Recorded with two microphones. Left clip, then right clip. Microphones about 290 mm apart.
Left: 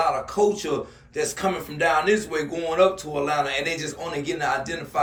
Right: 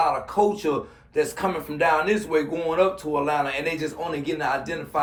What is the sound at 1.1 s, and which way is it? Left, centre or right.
Speech, centre.